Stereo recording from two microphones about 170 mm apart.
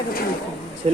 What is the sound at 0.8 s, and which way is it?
Speech, 35° right (ahead or behind).